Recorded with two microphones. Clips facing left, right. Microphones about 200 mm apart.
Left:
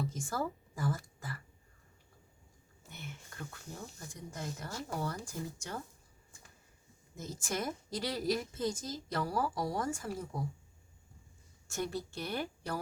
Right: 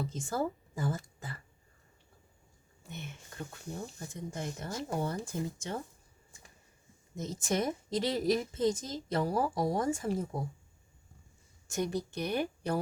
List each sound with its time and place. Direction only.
0.0 s whispering: 20° right (ahead or behind)
2.9 s a woman's voice: 20° right (ahead or behind)
7.2 s a woman's voice: 20° right (ahead or behind)
11.7 s a woman's voice: 20° right (ahead or behind)